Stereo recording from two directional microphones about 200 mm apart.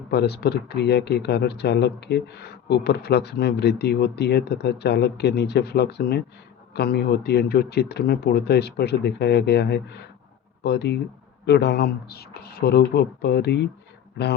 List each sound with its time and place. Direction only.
0.1 s speech: 55° left (ahead or behind)